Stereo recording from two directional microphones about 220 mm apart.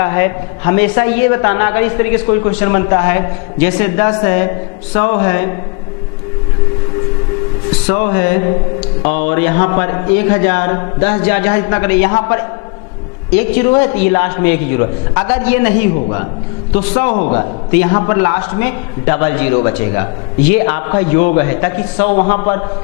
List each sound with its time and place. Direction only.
0.0 s a man's voice: 15° left (ahead or behind)
7.9 s a man's voice: 15° left (ahead or behind)
13.6 s a man's voice: 15° left (ahead or behind)
17.1 s a man's voice: 35° left (ahead or behind)
17.7 s a man's voice: 15° left (ahead or behind)